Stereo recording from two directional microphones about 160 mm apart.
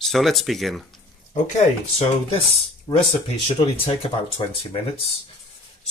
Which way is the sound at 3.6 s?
35° left (ahead or behind).